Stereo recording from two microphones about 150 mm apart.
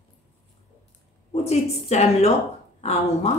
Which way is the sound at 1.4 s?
45° left (ahead or behind).